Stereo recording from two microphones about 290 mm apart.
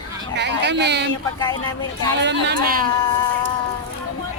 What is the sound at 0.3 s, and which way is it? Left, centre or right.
Speech, right.